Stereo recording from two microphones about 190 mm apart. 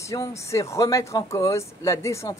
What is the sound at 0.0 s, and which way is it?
Speech, 15° left (ahead or behind).